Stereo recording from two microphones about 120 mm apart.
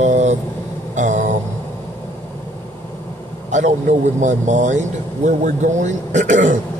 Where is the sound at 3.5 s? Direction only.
90° right.